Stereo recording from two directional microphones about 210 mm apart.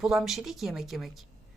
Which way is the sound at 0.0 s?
Centre (ahead or behind).